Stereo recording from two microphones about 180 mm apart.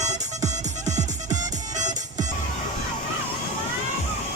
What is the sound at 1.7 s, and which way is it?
Music, 40° right (ahead or behind).